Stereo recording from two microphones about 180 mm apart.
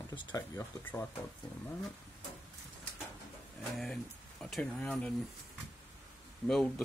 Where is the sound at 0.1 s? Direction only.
20° left (ahead or behind).